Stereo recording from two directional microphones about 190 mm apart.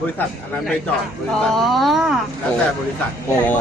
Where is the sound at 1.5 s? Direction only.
Centre (ahead or behind).